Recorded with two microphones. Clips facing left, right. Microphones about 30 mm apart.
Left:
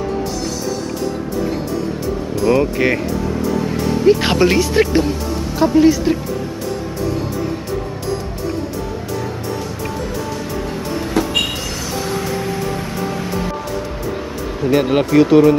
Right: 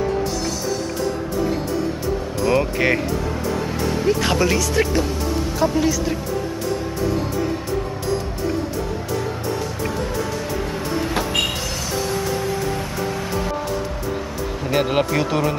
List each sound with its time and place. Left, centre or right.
2.3 s music: centre
4.1 s speech: left
13.0 s music: centre
14.6 s speech: centre